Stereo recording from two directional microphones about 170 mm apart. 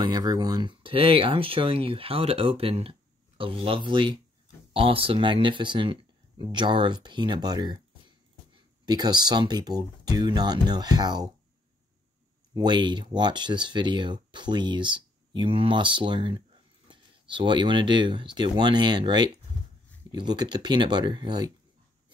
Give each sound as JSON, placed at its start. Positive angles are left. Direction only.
{"t": 0.0, "sound": "speech", "side_deg": -25}
{"t": 8.8, "sound": "speech", "side_deg": -25}
{"t": 12.5, "sound": "speech", "side_deg": -25}